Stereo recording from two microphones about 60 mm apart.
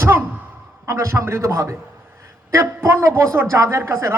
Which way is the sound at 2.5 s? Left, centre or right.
Right.